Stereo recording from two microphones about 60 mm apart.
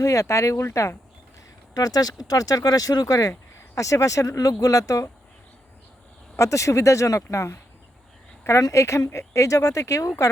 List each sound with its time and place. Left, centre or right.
0.0 s speech: left
1.7 s speech: left
3.8 s speech: left
6.3 s speech: left